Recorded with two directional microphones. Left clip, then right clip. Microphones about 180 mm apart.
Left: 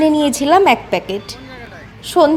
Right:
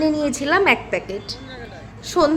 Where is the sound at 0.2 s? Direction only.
40° left (ahead or behind).